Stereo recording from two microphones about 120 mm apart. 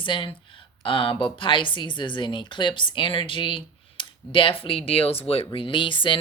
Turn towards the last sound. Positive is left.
turn(degrees=45)  # may be behind; listen again after turning